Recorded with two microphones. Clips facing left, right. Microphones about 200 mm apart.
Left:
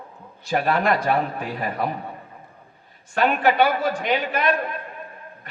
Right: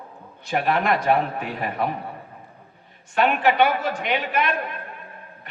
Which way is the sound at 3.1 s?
35° left (ahead or behind).